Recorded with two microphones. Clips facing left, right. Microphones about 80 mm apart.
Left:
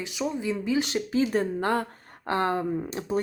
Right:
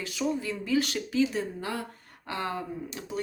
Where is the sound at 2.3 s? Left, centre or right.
Left.